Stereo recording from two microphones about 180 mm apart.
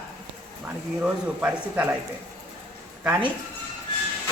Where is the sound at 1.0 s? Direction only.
10° right (ahead or behind).